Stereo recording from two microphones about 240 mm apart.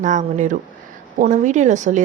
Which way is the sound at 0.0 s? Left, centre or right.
Right.